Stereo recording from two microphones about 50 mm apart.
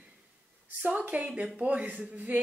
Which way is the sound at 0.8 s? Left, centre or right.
Right.